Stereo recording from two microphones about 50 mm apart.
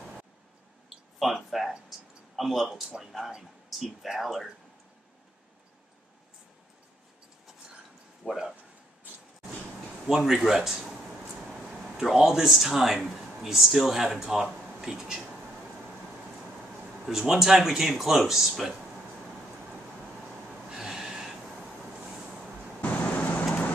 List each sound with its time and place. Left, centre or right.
1.2 s speech: centre
8.3 s speech: centre
10.0 s speech: centre
17.0 s speech: centre
20.7 s snort: centre
22.0 s vehicle: centre
22.8 s vehicle: left